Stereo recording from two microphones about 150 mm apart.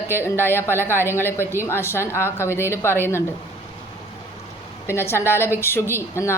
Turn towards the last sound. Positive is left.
turn(degrees=15)  # may be behind; listen again after turning